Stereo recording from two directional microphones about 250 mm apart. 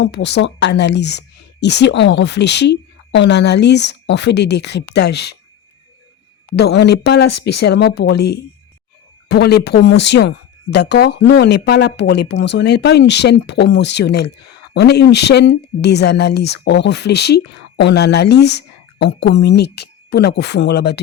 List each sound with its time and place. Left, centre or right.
0.0 s speech: left
6.6 s speech: left